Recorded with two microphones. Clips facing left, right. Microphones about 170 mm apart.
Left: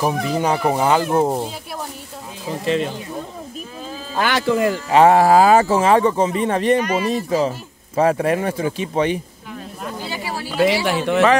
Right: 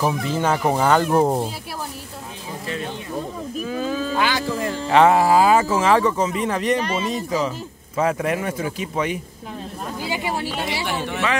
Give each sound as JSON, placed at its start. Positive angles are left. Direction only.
{"t": 0.0, "sound": "speech", "side_deg": 15}
{"t": 3.7, "sound": "speech", "side_deg": -85}
{"t": 4.3, "sound": "speech", "side_deg": 75}
{"t": 4.9, "sound": "speech", "side_deg": 30}
{"t": 5.2, "sound": "speech", "side_deg": 45}
{"t": 6.8, "sound": "speech", "side_deg": -25}
{"t": 7.4, "sound": "speech", "side_deg": 35}
{"t": 10.0, "sound": "a sound", "side_deg": -20}
{"t": 10.6, "sound": "speech", "side_deg": 90}